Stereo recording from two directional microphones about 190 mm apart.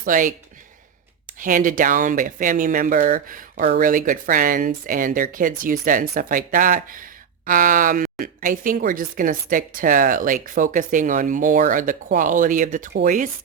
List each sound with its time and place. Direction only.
0.0 s speech: 45° right (ahead or behind)
1.4 s speech: 45° right (ahead or behind)